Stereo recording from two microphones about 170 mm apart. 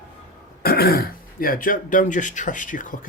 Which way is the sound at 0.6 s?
65° left (ahead or behind).